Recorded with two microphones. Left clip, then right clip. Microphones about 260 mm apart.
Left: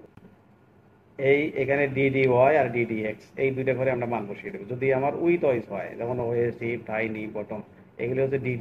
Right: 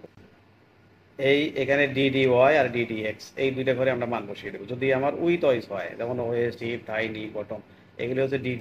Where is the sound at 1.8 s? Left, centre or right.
Right.